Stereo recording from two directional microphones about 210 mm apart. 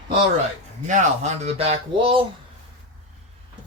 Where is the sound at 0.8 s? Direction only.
35° right (ahead or behind).